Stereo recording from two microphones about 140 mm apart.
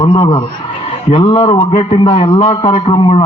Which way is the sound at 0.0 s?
35° left (ahead or behind).